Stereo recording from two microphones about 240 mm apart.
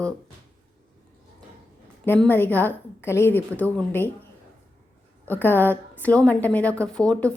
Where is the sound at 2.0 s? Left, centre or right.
Centre.